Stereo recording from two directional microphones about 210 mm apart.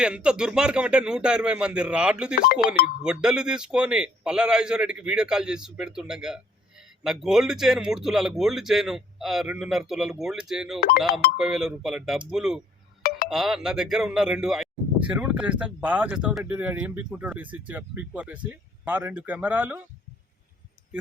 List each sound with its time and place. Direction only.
0.0 s a man's voice: 5° right (ahead or behind)
2.3 s speech: 45° left (ahead or behind)
3.0 s a man's voice: 5° right (ahead or behind)
10.8 s speech: 45° left (ahead or behind)
11.3 s a man's voice: centre (ahead or behind)
13.0 s a sound: 45° left (ahead or behind)
13.2 s speech: centre (ahead or behind)